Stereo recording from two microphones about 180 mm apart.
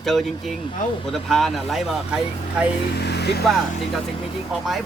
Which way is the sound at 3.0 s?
65° left (ahead or behind).